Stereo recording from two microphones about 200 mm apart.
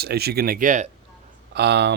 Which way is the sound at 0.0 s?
50° right (ahead or behind).